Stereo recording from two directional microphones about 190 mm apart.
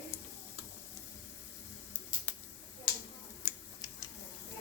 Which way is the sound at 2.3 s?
10° left (ahead or behind).